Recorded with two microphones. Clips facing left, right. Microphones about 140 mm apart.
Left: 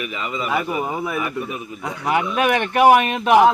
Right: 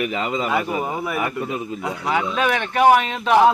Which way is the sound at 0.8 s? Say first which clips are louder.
Left 1 dB; 15° left (ahead or behind).